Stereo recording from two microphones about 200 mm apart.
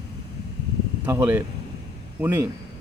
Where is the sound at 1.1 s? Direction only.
10° right (ahead or behind).